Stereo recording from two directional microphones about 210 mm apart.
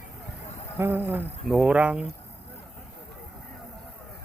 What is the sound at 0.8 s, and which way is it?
Speech, 10° right (ahead or behind).